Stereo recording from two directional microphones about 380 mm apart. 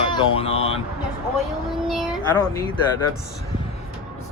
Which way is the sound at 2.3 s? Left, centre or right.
Centre.